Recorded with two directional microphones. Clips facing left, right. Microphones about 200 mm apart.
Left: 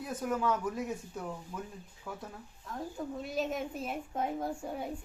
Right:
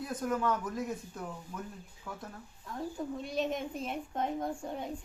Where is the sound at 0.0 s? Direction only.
10° left (ahead or behind).